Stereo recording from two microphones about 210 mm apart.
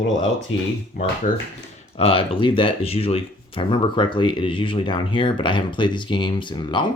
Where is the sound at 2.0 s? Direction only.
25° left (ahead or behind).